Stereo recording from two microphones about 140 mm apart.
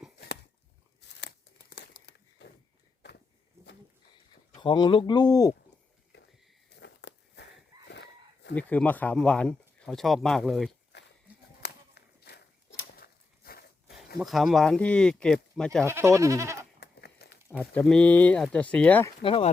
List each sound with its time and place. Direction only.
4.5 s speech: 35° left (ahead or behind)
8.5 s speech: 10° left (ahead or behind)
12.9 s a sound: 90° left
14.2 s speech: centre (ahead or behind)
15.9 s speech: 20° right (ahead or behind)
17.2 s a sound: 90° left
17.7 s speech: 5° left (ahead or behind)
19.2 s speech: 40° left (ahead or behind)